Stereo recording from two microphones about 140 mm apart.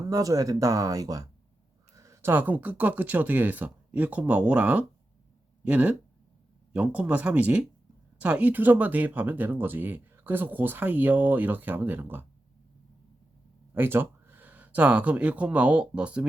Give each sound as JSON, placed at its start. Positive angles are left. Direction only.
{"t": 0.1, "sound": "speech", "side_deg": -25}
{"t": 13.7, "sound": "speech", "side_deg": -15}